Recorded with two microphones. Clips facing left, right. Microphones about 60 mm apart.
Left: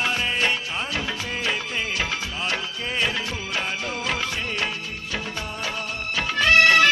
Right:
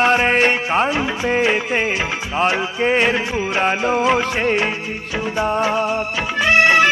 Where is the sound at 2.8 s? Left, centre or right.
Right.